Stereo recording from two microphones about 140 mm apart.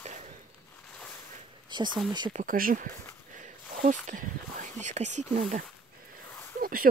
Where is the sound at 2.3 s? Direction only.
70° right (ahead or behind); by 2.9 s 90° right.